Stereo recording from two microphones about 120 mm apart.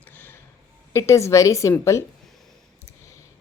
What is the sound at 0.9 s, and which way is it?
Speech, 25° left (ahead or behind).